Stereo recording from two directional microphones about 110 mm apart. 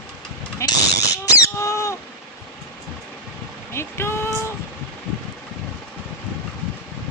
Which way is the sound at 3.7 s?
25° left (ahead or behind).